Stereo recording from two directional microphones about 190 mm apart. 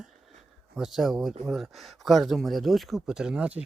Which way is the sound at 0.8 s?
Centre (ahead or behind).